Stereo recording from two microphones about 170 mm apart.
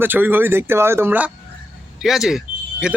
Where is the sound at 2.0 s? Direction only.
Centre (ahead or behind).